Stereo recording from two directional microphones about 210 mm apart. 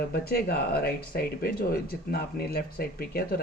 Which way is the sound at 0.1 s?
50° left (ahead or behind).